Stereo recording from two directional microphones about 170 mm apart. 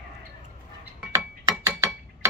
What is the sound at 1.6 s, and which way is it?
Gears, 15° right (ahead or behind).